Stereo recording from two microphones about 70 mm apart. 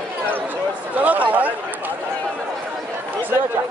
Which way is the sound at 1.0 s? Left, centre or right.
Right.